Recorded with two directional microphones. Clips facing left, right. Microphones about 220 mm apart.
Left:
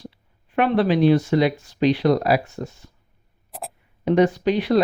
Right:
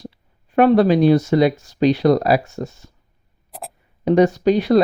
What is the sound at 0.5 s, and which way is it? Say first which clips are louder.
Speech: right 6 dB; 40° right (ahead or behind).